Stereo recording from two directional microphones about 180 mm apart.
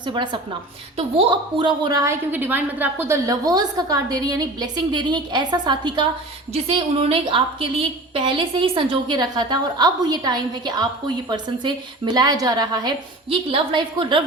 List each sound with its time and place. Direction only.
0.0 s a woman's voice: 25° right (ahead or behind)